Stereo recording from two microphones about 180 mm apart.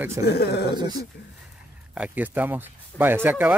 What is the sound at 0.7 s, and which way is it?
Speech, 25° right (ahead or behind).